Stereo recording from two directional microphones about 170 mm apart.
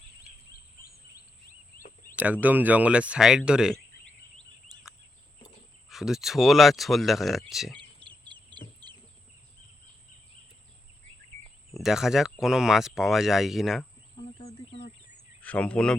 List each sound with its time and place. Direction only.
2.1 s speech: 10° right (ahead or behind)
4.4 s a sound: centre (ahead or behind)
5.9 s speech: centre (ahead or behind)
7.8 s bird: 30° right (ahead or behind)
8.8 s chicken: 25° right (ahead or behind)
11.7 s speech: centre (ahead or behind)
14.2 s a sound: 40° left (ahead or behind)
15.4 s speech: 10° left (ahead or behind)